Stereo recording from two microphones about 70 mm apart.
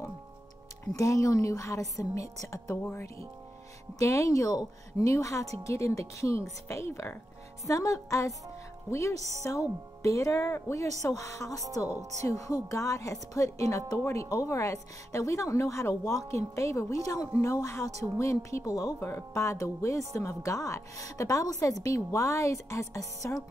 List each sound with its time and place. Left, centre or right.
0.9 s speech: left
2.9 s speech: left
4.0 s speech: left